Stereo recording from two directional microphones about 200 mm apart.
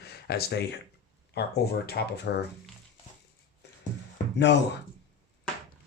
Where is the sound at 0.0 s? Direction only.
50° left (ahead or behind).